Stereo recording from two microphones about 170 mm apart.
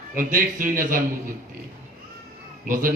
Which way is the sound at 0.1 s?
50° right (ahead or behind).